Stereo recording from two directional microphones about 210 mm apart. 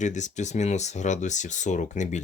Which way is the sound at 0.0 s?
35° left (ahead or behind).